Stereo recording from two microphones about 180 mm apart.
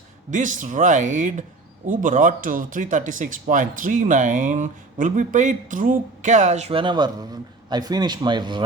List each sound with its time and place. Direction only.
0.3 s speech: 45° right (ahead or behind); by 8.6 s 25° right (ahead or behind)